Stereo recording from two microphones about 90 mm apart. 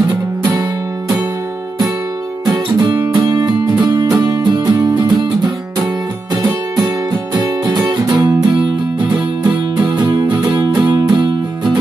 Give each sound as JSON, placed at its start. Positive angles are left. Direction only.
{"t": 0.1, "sound": "music", "side_deg": -45}
{"t": 2.4, "sound": "music", "side_deg": -55}
{"t": 7.3, "sound": "music", "side_deg": -45}
{"t": 9.8, "sound": "music", "side_deg": -55}
{"t": 11.0, "sound": "music", "side_deg": -40}
{"t": 11.2, "sound": "music", "side_deg": -60}